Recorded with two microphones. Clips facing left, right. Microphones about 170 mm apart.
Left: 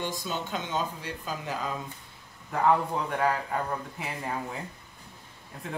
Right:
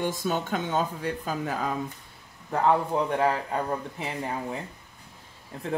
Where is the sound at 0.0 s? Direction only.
50° right (ahead or behind).